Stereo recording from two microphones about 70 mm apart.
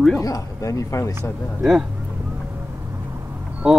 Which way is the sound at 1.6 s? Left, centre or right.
Centre.